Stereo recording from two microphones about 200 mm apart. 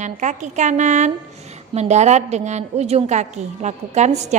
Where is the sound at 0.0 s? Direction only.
35° right (ahead or behind).